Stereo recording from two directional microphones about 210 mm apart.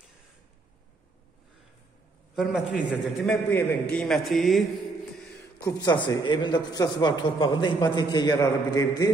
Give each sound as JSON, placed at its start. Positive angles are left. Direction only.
{"t": 2.3, "sound": "a man's voice", "side_deg": 0}
{"t": 5.7, "sound": "a man's voice", "side_deg": 20}